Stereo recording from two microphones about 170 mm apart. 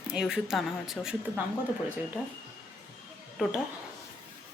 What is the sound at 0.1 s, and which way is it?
Speech, 5° right (ahead or behind).